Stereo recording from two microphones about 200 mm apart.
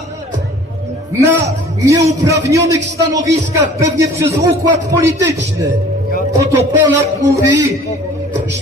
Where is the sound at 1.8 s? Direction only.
15° right (ahead or behind).